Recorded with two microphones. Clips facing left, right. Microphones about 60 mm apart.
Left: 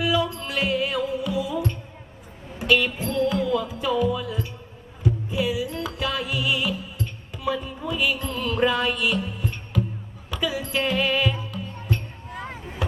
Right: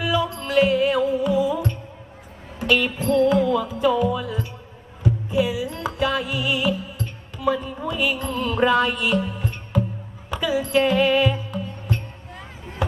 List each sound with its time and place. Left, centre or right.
0.0 s music: right
2.7 s music: right
10.2 s music: right